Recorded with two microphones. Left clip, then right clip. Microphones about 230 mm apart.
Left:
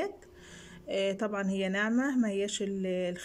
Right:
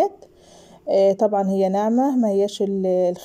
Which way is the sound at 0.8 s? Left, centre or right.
Centre.